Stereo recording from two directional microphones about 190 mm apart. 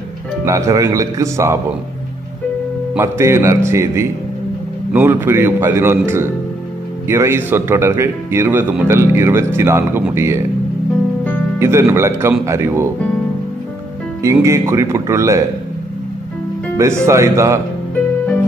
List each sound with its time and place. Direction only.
0.5 s speech: 15° right (ahead or behind)
2.9 s speech: 15° right (ahead or behind)
11.6 s speech: 15° right (ahead or behind)
14.2 s speech: 15° right (ahead or behind)
16.7 s speech: 15° right (ahead or behind)